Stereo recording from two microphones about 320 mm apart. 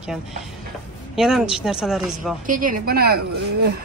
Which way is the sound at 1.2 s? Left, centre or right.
Centre.